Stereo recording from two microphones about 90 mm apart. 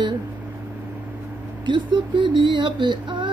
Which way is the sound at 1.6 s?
60° right (ahead or behind).